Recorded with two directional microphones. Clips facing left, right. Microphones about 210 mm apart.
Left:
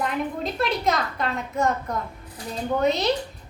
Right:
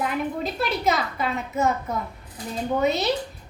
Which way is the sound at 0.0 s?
5° right (ahead or behind).